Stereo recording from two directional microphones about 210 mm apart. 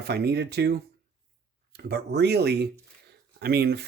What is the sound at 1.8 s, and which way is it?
Speech, 50° right (ahead or behind).